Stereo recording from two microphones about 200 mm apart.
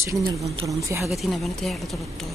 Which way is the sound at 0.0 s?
15° right (ahead or behind).